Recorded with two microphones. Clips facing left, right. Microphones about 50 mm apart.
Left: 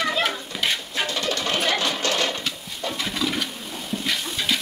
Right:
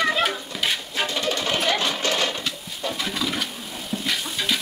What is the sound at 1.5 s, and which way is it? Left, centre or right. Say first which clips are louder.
Sewing machine: even; centre.